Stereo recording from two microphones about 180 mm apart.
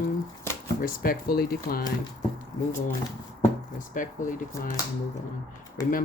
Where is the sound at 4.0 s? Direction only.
45° left (ahead or behind).